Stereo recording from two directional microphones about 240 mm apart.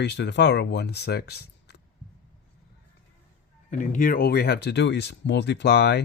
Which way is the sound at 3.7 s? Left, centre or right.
Left.